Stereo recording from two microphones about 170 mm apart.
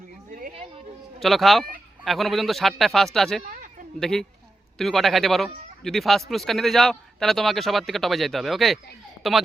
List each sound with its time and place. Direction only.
1.2 s a man's voice: centre (ahead or behind)
3.5 s a sound: 50° right (ahead or behind)
4.0 s a man's voice: centre (ahead or behind)